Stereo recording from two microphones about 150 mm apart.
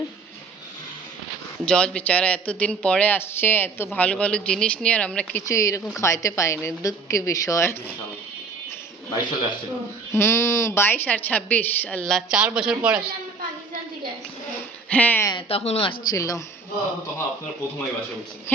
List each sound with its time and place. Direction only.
1.6 s a woman's voice: 5° left (ahead or behind)
5.5 s a woman's voice: 20° left (ahead or behind)
9.0 s a woman's voice: 30° left (ahead or behind)
10.1 s a woman's voice: 15° left (ahead or behind); by 13.1 s 5° right (ahead or behind)
14.8 s speech: 10° left (ahead or behind)
15.3 s a woman's voice: 35° left (ahead or behind)
16.0 s a woman's voice: 20° left (ahead or behind)